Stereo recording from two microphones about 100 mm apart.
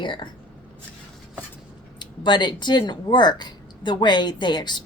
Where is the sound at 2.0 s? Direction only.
50° left (ahead or behind).